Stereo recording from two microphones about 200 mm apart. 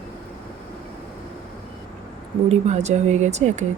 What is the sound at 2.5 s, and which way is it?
Speech, 35° right (ahead or behind).